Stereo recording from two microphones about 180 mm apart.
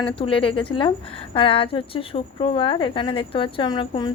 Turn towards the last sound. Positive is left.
turn(degrees=25)  # may be behind; listen again after turning